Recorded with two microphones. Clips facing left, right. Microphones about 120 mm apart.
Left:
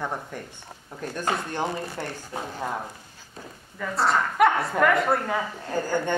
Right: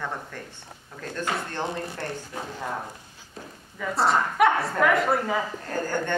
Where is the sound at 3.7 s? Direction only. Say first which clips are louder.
Right 1 dB; centre (ahead or behind).